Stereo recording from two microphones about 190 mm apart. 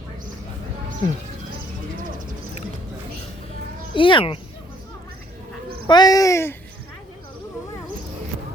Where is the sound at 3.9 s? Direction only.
25° left (ahead or behind).